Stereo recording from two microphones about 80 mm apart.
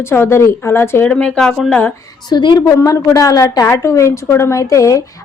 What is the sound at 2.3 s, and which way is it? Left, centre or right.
Speech, left.